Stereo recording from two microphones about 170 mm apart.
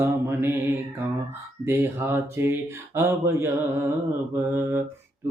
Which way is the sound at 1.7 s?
15° right (ahead or behind).